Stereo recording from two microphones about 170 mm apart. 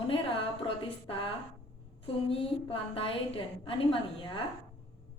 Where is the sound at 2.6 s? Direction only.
35° left (ahead or behind).